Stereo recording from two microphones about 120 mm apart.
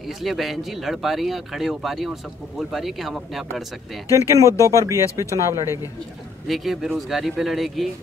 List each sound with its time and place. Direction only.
0.0 s speech: centre (ahead or behind)
4.4 s speech: 25° right (ahead or behind)
6.4 s speech: centre (ahead or behind)